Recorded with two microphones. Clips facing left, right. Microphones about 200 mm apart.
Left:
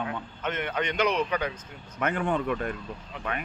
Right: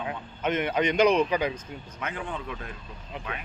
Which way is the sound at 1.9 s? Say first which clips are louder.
Left 8 dB; 60° left (ahead or behind).